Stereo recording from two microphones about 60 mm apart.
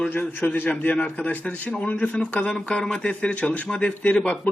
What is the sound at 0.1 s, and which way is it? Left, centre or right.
Speech, left.